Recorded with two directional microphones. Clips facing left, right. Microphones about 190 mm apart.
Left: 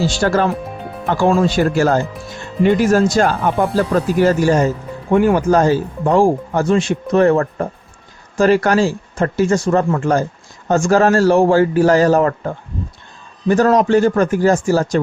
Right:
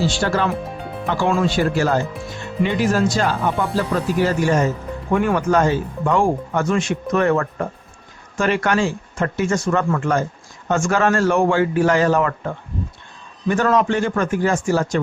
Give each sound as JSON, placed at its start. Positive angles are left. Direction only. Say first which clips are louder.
{"t": 0.0, "sound": "speech", "louder": "left 4 dB", "side_deg": 40}